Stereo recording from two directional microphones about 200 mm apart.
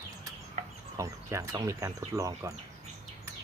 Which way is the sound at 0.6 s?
35° right (ahead or behind).